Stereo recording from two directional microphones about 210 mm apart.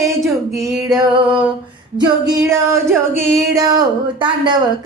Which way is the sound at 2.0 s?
20° right (ahead or behind).